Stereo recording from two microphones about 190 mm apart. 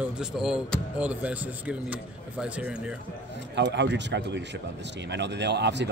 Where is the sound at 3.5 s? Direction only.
65° right (ahead or behind).